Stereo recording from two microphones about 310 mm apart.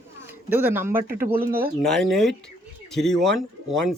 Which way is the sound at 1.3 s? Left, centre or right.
Right.